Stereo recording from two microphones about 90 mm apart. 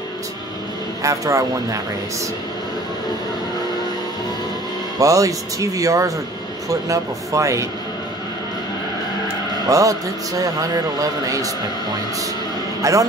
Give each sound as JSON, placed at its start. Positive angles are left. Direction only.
{"t": 1.0, "sound": "a man's voice", "side_deg": -40}
{"t": 4.9, "sound": "a man's voice", "side_deg": -40}
{"t": 9.7, "sound": "a man's voice", "side_deg": -40}
{"t": 12.8, "sound": "a man's voice", "side_deg": -40}